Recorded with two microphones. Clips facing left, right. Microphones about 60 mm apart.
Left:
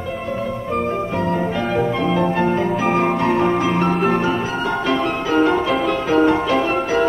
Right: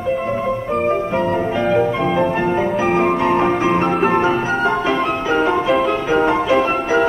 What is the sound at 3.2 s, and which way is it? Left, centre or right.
Music, right.